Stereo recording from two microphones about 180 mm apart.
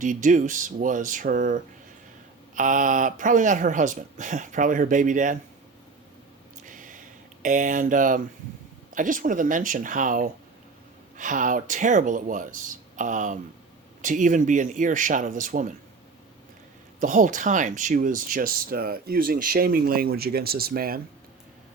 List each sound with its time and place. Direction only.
0.0 s speech: 45° right (ahead or behind)
6.6 s a sound: 45° right (ahead or behind)
7.4 s speech: 45° right (ahead or behind)
17.0 s speech: 45° right (ahead or behind)